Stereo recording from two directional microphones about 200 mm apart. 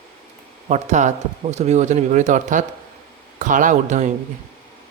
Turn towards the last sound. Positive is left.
turn(degrees=-35)  # may be behind; listen again after turning